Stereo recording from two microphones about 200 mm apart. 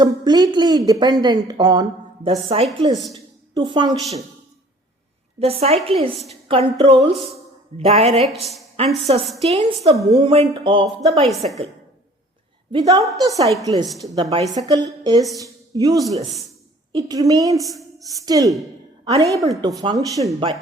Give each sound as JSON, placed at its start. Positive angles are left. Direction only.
{"t": 0.0, "sound": "a woman's voice", "side_deg": -20}
{"t": 2.8, "sound": "a woman's voice", "side_deg": -20}
{"t": 5.4, "sound": "a woman's voice", "side_deg": -30}
{"t": 12.7, "sound": "a woman's voice", "side_deg": -20}